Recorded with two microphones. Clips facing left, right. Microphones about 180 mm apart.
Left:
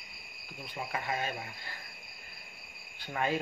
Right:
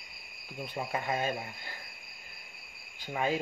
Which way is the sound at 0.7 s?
30° right (ahead or behind).